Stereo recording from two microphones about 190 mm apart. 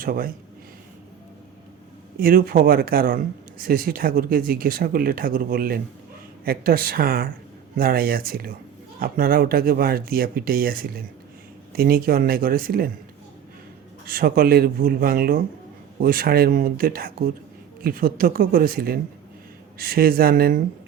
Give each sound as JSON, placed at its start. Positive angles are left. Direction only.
{"t": 0.0, "sound": "a man's voice", "side_deg": -50}
{"t": 2.1, "sound": "speech", "side_deg": -50}
{"t": 14.1, "sound": "speech", "side_deg": -50}